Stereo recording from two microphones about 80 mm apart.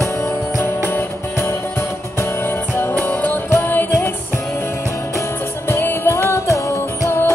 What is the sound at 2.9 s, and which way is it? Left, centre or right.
Music, centre.